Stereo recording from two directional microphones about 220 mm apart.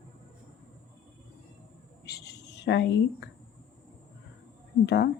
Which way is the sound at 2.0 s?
50° left (ahead or behind).